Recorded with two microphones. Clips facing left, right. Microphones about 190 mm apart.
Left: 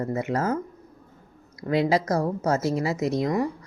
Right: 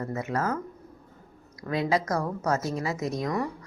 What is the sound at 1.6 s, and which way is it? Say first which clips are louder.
Speech: left 4 dB; 30° left (ahead or behind).